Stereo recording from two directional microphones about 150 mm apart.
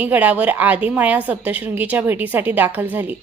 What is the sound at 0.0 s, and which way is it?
A woman's voice, 10° right (ahead or behind).